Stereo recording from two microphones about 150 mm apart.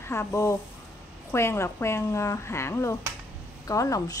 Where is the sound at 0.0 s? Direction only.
15° left (ahead or behind).